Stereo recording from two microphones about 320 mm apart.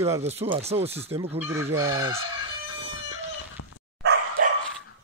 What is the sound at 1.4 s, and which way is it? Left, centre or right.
Speech, centre.